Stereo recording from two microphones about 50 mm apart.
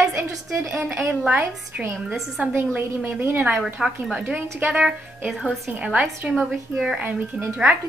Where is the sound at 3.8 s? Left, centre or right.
Centre.